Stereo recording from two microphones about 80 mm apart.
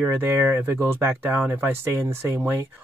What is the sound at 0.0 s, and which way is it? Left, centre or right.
Speech, right.